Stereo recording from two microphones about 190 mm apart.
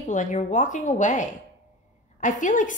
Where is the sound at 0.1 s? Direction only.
40° left (ahead or behind).